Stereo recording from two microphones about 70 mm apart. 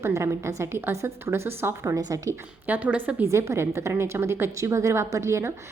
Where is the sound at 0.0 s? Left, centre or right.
Right.